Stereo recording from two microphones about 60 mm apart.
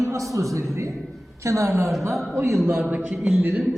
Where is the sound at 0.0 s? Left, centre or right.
Right.